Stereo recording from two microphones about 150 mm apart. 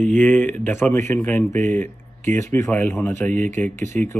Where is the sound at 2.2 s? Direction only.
55° right (ahead or behind).